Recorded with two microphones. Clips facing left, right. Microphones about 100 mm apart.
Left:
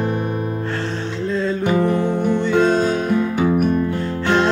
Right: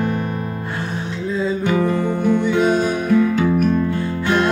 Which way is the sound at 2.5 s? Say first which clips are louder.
Left 1 dB; 10° right (ahead or behind).